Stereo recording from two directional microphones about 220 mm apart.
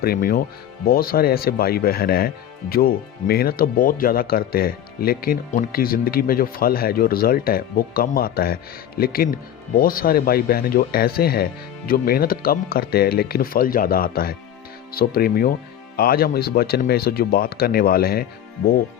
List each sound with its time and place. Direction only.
0.0 s speech: 40° left (ahead or behind)